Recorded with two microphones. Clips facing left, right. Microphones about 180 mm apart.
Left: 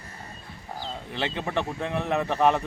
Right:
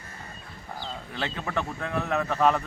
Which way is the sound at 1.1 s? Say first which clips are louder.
Left 3 dB; 25° left (ahead or behind).